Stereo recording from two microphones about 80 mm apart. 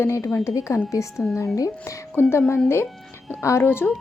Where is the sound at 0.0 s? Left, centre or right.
Left.